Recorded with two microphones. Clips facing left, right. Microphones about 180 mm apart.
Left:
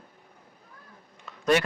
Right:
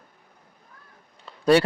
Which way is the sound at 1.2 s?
35° right (ahead or behind).